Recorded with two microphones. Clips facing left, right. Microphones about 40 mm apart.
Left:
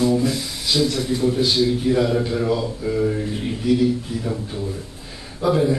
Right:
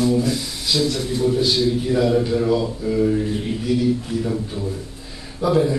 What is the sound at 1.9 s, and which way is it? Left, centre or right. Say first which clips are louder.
A man's voice: right 2 dB; centre.